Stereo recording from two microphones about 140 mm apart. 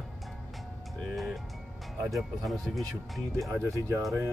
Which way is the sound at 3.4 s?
20° right (ahead or behind).